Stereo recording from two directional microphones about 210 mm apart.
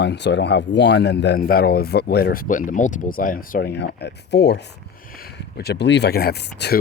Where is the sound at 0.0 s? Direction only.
55° left (ahead or behind).